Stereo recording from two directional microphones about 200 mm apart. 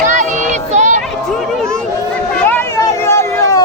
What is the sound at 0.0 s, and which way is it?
Child singing, 40° right (ahead or behind).